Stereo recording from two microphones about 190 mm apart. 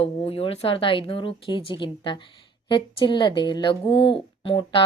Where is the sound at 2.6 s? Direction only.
25° left (ahead or behind).